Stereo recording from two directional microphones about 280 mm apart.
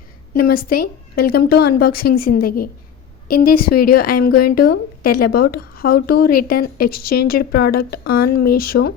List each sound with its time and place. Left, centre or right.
0.3 s a woman's voice: left